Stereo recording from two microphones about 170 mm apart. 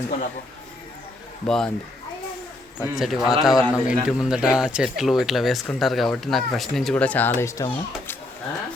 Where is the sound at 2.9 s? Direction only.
Centre (ahead or behind); by 7.7 s 15° left (ahead or behind).